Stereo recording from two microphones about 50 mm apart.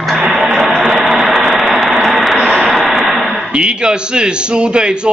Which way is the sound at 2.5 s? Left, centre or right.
Centre.